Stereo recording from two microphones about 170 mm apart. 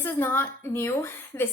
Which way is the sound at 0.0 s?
10° left (ahead or behind).